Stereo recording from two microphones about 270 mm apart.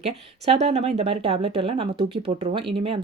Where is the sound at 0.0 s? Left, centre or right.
Right.